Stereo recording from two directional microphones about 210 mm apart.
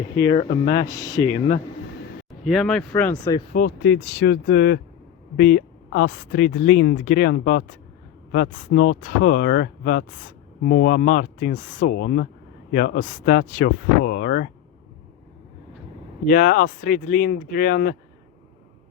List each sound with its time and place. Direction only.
0.3 s speech: 30° left (ahead or behind)
0.9 s speech: 15° left (ahead or behind)
2.4 s speech: centre (ahead or behind)
3.8 s speech: 55° left (ahead or behind)
16.2 s speech: 40° left (ahead or behind)